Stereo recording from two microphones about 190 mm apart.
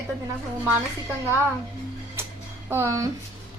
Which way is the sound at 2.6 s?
15° right (ahead or behind).